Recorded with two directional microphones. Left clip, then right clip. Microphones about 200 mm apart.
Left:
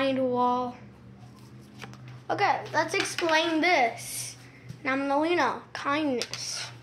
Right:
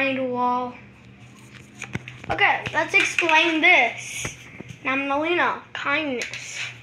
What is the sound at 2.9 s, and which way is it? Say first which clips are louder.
Speech: right 11 dB; 5° right (ahead or behind).